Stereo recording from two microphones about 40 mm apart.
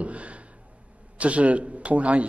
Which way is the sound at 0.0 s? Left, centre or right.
Right.